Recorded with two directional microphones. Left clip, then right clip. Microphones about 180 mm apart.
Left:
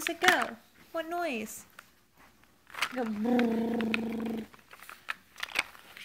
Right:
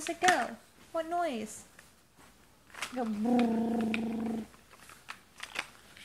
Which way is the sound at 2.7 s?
30° left (ahead or behind).